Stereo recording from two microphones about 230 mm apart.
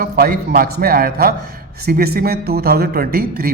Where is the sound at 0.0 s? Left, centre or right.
Right.